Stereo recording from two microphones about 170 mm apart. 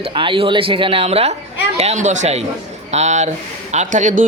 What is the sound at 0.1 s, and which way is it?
A man's voice, 30° right (ahead or behind).